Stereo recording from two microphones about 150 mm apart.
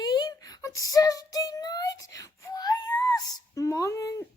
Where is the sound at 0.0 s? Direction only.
25° left (ahead or behind).